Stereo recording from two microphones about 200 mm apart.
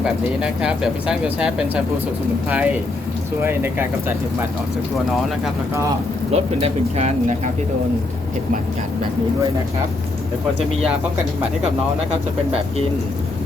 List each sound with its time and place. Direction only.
0.0 s speech: 5° right (ahead or behind)
6.3 s speech: 30° right (ahead or behind)